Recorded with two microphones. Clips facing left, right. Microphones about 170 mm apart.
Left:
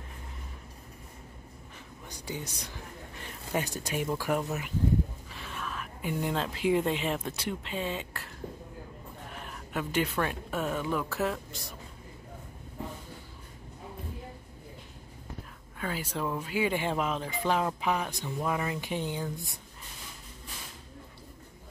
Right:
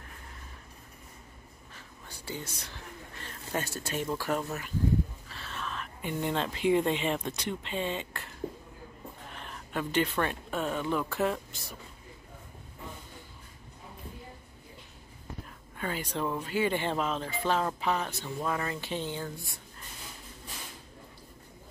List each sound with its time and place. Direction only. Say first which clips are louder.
2.0 s speech: left 1 dB; 15° left (ahead or behind)
9.3 s speech: even; 5° left (ahead or behind)
15.8 s speech: right 1 dB; 5° left (ahead or behind); by 19.6 s 20° left (ahead or behind)